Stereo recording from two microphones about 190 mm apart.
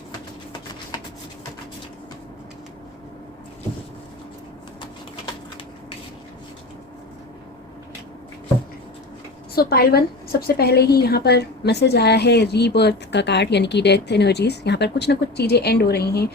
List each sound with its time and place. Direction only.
9.6 s a woman's voice: 55° left (ahead or behind)